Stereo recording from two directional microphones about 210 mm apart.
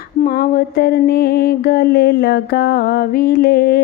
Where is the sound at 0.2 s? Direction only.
45° left (ahead or behind).